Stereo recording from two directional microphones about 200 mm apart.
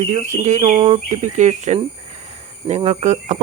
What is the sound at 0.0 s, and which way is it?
Speech, 35° right (ahead or behind).